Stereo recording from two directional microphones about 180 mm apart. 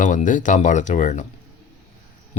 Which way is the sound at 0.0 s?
45° left (ahead or behind).